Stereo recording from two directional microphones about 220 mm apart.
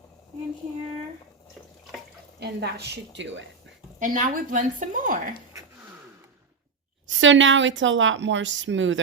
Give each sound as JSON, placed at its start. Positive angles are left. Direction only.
{"t": 2.4, "sound": "a woman's voice", "side_deg": -50}
{"t": 4.0, "sound": "a woman's voice", "side_deg": -35}
{"t": 7.2, "sound": "a woman's voice", "side_deg": -60}